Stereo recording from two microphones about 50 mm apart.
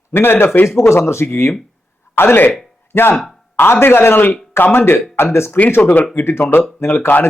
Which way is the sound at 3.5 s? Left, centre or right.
Left.